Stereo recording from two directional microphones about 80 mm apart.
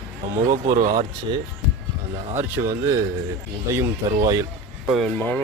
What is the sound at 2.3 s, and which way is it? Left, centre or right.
Speech, right.